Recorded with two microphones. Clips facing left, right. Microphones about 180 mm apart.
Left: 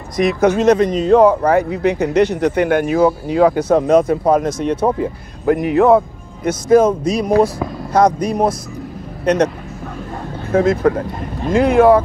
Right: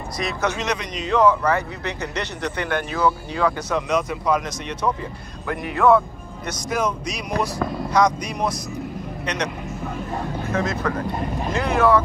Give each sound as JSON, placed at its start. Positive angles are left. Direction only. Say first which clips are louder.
{"t": 0.3, "sound": "a man's voice", "louder": "left 13 dB", "side_deg": 50}
{"t": 10.5, "sound": "speech", "louder": "left 11 dB", "side_deg": 55}